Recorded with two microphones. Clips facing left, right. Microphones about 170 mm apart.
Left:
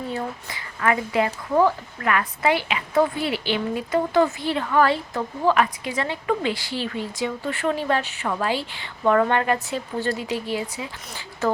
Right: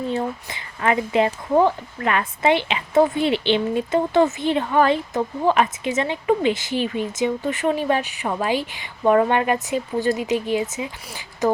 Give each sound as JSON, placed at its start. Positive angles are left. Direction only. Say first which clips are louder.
{"t": 0.1, "sound": "a woman's voice", "louder": "right 4 dB", "side_deg": -25}